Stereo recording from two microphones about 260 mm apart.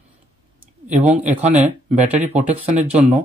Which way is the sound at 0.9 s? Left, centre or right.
Right.